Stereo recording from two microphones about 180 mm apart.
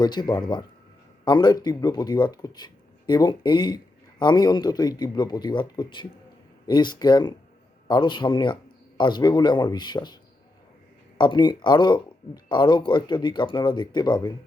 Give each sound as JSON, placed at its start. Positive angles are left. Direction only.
{"t": 0.0, "sound": "a man's voice", "side_deg": 25}
{"t": 11.2, "sound": "speech", "side_deg": 25}